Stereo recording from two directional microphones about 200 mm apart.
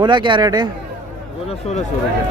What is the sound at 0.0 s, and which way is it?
Speech, 25° right (ahead or behind).